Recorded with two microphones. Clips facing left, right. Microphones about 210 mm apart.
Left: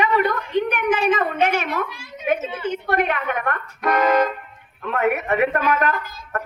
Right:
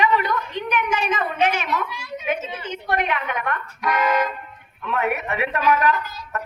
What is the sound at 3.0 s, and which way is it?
A woman's voice, 50° left (ahead or behind).